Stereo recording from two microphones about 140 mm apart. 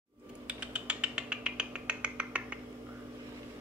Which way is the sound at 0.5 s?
10° right (ahead or behind).